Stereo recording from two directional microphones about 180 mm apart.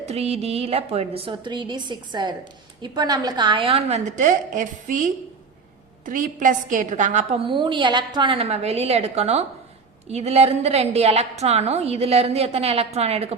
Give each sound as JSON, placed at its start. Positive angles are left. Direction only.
{"t": 0.1, "sound": "a woman's voice", "side_deg": -35}